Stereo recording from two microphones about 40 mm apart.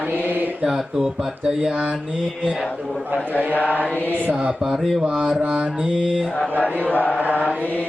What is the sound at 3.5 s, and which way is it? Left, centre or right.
Mantra, left.